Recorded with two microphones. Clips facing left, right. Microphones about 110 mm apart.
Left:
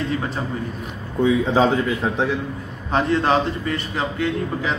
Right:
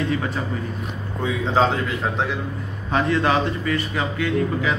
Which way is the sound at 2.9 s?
30° left (ahead or behind).